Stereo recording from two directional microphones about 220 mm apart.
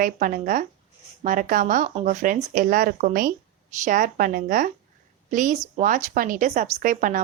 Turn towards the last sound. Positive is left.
turn(degrees=-35)  # may be behind; listen again after turning